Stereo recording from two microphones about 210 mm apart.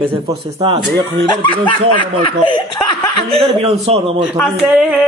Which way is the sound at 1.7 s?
25° left (ahead or behind).